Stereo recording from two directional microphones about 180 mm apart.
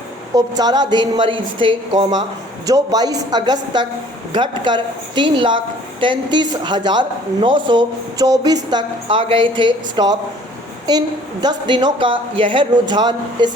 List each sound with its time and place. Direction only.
0.3 s a woman's voice: 20° right (ahead or behind)